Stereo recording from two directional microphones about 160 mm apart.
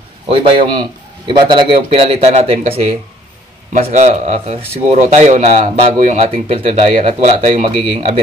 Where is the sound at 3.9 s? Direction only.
45° right (ahead or behind).